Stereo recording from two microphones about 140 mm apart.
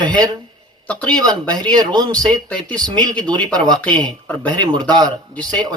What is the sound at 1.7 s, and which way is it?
Speech, 30° right (ahead or behind).